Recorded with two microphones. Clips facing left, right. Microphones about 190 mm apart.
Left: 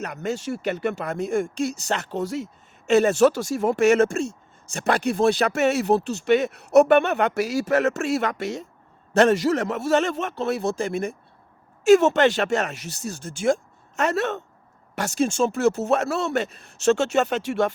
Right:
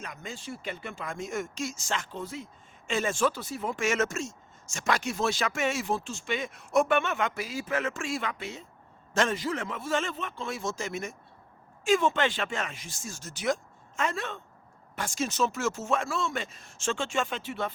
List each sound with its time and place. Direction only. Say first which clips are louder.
0.0 s speech: left 12 dB; 70° left (ahead or behind)
3.9 s speech: left 9 dB; 35° left (ahead or behind)
4.7 s speech: left 7 dB; 60° left (ahead or behind)
11.9 s speech: left 10 dB; 75° left (ahead or behind); by 13.4 s 55° left (ahead or behind)
13.9 s speech: left 9 dB; 70° left (ahead or behind)
15.3 s speech: left 6 dB; 50° left (ahead or behind)
15.8 s speech: left 7 dB; 65° left (ahead or behind); by 17.7 s 85° left